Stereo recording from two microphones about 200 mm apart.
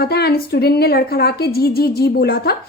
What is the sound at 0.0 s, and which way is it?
A woman's voice, 50° left (ahead or behind).